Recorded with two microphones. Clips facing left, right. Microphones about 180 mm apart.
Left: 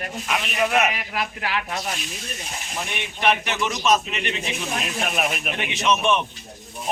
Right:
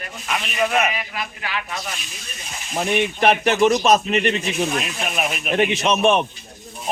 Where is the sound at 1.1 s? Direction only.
55° left (ahead or behind).